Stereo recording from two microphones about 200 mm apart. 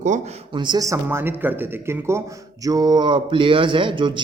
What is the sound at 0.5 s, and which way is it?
A man's voice, 20° right (ahead or behind).